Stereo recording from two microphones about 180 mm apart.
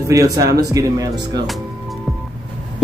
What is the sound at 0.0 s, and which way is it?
Speech, 20° right (ahead or behind).